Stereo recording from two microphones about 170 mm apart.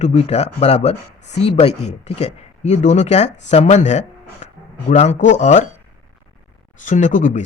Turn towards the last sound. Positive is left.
turn(degrees=45)  # may be behind; listen again after turning